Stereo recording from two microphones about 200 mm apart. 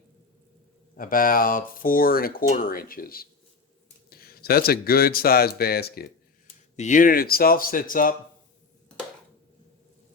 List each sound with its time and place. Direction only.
0.9 s speech: 45° left (ahead or behind)
6.7 s speech: 40° left (ahead or behind)